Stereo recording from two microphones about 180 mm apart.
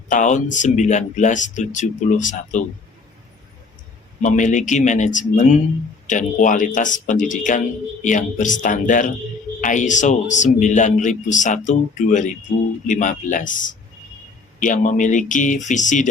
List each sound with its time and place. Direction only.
0.1 s speech: 45° left (ahead or behind)
4.2 s speech: 45° left (ahead or behind)